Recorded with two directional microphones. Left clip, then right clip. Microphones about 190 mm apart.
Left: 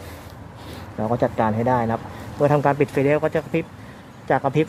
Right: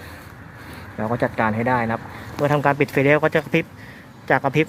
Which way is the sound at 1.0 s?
Centre (ahead or behind).